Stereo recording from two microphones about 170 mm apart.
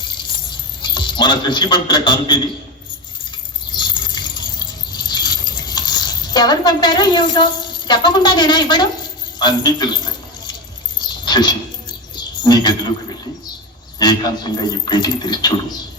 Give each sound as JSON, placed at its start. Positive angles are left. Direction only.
{"t": 0.8, "sound": "a man's voice", "side_deg": 25}
{"t": 3.7, "sound": "keys jangling", "side_deg": 25}
{"t": 9.4, "sound": "a man's voice", "side_deg": 25}
{"t": 11.3, "sound": "a sound", "side_deg": 25}
{"t": 14.0, "sound": "speech", "side_deg": 25}